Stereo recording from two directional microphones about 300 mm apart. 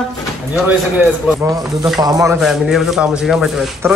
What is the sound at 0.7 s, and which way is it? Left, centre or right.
Speech, centre.